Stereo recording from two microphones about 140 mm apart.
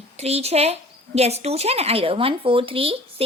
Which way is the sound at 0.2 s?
50° right (ahead or behind).